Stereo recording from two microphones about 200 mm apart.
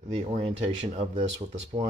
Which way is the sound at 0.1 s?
30° right (ahead or behind).